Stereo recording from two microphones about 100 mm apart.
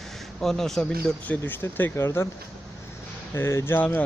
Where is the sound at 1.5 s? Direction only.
20° left (ahead or behind).